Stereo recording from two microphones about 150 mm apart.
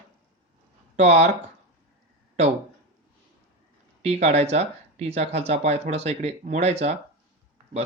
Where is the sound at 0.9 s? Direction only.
45° right (ahead or behind).